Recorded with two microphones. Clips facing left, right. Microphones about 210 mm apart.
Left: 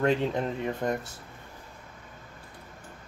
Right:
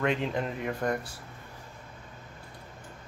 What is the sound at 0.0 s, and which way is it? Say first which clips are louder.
Speech: left 3 dB; 35° left (ahead or behind).